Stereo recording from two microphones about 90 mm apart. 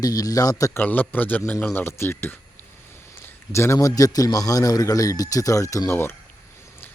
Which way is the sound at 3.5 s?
30° left (ahead or behind).